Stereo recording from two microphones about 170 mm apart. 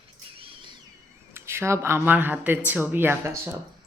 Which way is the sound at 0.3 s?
35° right (ahead or behind).